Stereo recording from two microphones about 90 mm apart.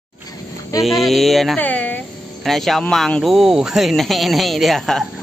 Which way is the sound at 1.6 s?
20° left (ahead or behind).